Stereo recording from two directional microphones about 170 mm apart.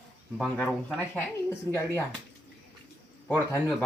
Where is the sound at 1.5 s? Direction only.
15° left (ahead or behind).